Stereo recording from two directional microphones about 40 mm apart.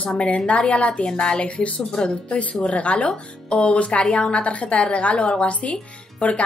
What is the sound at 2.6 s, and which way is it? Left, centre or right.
A woman's voice, left.